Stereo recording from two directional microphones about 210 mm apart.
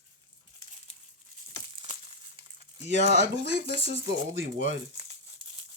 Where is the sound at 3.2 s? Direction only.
55° right (ahead or behind).